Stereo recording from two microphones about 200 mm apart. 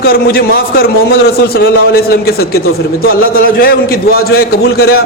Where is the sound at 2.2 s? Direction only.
50° left (ahead or behind).